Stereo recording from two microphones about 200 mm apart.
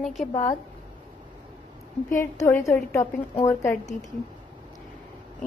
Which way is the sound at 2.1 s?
15° left (ahead or behind).